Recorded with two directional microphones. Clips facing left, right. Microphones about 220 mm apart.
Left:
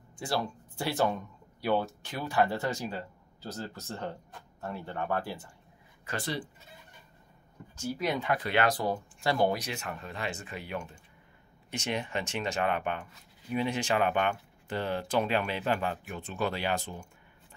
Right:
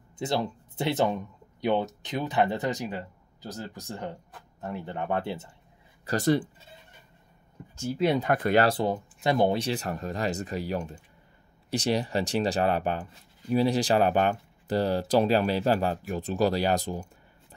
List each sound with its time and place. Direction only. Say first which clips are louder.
0.2 s speech: right 4 dB; 20° right (ahead or behind)
6.0 s speech: right 11 dB; 45° right (ahead or behind)
7.8 s speech: right 6 dB; 30° right (ahead or behind)
8.2 s speech: right 6 dB; 45° right (ahead or behind)
8.6 s speech: right 4 dB; 25° right (ahead or behind)